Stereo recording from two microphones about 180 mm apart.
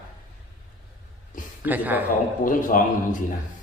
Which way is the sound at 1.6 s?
10° right (ahead or behind).